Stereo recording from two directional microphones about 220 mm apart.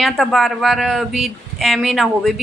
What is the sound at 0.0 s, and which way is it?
A woman's voice, centre (ahead or behind).